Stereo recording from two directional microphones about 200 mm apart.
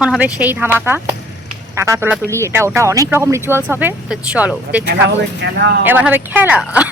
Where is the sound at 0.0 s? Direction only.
5° right (ahead or behind).